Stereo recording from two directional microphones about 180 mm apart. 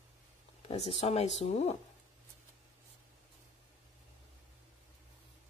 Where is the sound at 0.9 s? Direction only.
35° left (ahead or behind).